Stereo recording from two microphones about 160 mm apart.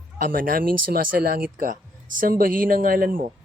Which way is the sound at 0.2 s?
60° right (ahead or behind).